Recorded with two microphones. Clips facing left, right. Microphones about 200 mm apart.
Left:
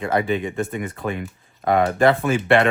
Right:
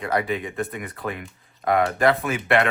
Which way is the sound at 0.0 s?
25° left (ahead or behind).